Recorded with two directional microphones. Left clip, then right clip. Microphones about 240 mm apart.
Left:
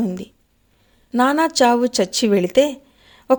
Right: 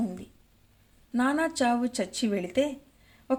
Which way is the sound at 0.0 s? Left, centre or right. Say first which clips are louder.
Left 9 dB; left.